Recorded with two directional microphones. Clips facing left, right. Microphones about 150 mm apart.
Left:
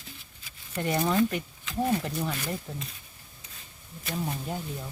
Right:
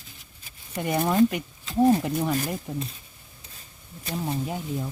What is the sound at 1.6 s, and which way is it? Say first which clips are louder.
Speech: right 8 dB; 35° right (ahead or behind).